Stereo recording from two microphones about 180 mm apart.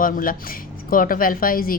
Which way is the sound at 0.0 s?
50° left (ahead or behind).